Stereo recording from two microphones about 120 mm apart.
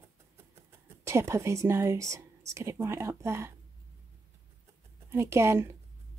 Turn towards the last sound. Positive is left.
turn(degrees=-20)  # may be behind; listen again after turning